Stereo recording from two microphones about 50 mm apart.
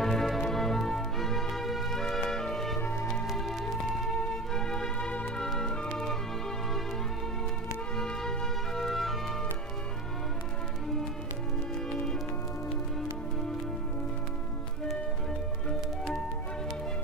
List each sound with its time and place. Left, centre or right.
0.0 s music: centre
2.8 s music: left
3.3 s music: centre
8.0 s music: centre
11.9 s music: centre